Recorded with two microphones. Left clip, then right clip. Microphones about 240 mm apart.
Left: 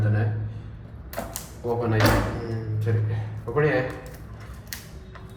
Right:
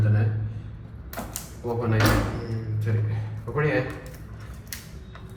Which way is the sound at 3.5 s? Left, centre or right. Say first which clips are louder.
Left 3 dB; centre.